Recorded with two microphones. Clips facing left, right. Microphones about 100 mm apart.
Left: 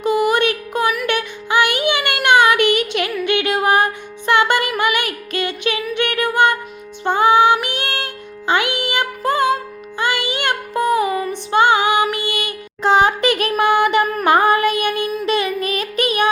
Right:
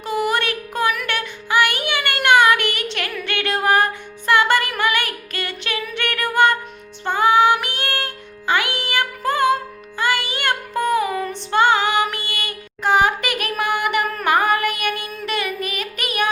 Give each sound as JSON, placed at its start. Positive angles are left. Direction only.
{"t": 0.0, "sound": "a sound", "side_deg": 15}
{"t": 1.0, "sound": "music", "side_deg": 15}
{"t": 10.0, "sound": "child singing", "side_deg": 20}